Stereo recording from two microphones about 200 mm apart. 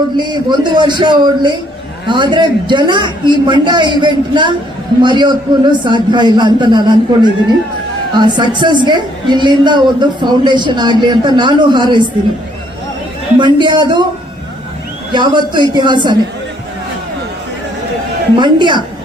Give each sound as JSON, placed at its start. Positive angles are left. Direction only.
{"t": 0.2, "sound": "a woman's voice", "side_deg": -20}
{"t": 13.4, "sound": "a woman's voice", "side_deg": -25}
{"t": 15.1, "sound": "a woman's voice", "side_deg": -20}
{"t": 18.3, "sound": "a woman's voice", "side_deg": -25}